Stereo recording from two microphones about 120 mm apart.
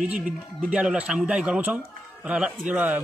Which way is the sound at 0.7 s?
10° right (ahead or behind).